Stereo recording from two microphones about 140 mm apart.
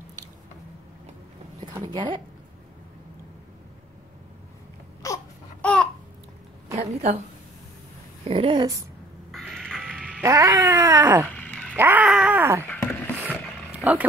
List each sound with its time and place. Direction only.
1.7 s a woman's voice: 30° right (ahead or behind)
5.0 s baby cry: 25° left (ahead or behind)
5.6 s babbling: 10° left (ahead or behind)
6.8 s a woman's voice: 50° right (ahead or behind)
8.3 s speech: 40° right (ahead or behind)
9.5 s music: centre (ahead or behind)
10.2 s cat: 20° right (ahead or behind)
11.3 s a sound: 10° left (ahead or behind)
11.7 s cat: 15° right (ahead or behind)
12.4 s cat: 20° right (ahead or behind)
12.8 s roaring cats: 15° left (ahead or behind)